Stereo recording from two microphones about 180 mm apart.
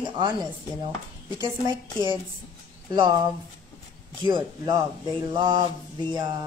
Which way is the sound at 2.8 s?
20° right (ahead or behind).